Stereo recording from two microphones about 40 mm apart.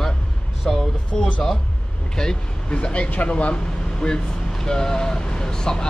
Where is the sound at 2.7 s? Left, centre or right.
Left.